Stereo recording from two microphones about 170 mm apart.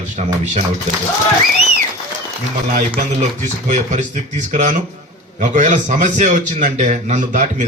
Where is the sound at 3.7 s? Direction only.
45° right (ahead or behind).